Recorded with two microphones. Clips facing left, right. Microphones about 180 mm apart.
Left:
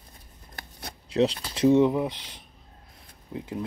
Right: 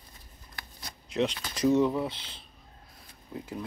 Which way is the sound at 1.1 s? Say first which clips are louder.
Left 5 dB; 35° left (ahead or behind).